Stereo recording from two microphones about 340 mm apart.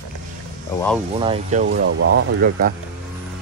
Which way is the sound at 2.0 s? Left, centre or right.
Right.